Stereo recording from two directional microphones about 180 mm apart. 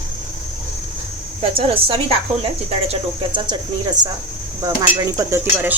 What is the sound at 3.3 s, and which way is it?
Speech, 25° right (ahead or behind).